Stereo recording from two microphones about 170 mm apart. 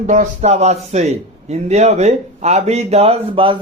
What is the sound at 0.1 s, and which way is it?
A man's voice, 45° right (ahead or behind).